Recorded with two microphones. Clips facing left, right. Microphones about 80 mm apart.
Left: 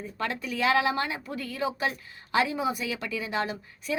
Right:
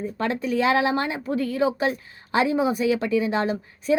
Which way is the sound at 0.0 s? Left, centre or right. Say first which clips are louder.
Right 7 dB; right.